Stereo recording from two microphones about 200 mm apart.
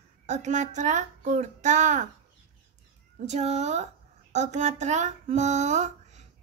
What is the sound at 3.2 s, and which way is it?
Speech, 35° right (ahead or behind).